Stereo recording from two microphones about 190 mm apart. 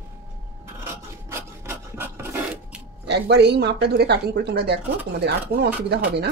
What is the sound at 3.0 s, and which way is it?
Speech, 60° right (ahead or behind).